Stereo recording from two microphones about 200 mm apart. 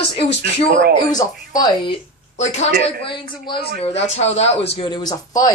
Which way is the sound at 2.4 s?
35° left (ahead or behind).